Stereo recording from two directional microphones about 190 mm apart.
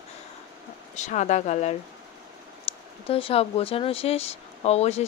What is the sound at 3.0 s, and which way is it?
Speech, 30° left (ahead or behind).